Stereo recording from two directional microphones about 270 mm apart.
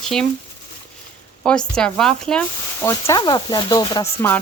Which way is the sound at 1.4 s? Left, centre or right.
Centre.